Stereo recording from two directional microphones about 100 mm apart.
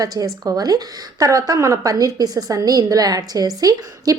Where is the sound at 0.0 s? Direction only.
40° right (ahead or behind).